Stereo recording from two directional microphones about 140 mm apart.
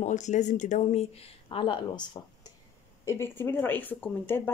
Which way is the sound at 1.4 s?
35° left (ahead or behind).